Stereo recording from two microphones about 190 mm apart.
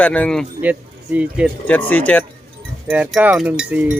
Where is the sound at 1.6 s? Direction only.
10° left (ahead or behind).